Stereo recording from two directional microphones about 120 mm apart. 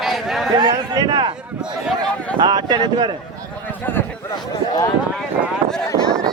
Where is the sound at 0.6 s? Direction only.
35° right (ahead or behind).